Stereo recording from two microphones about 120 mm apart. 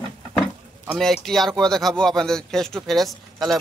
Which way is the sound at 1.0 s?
Centre (ahead or behind).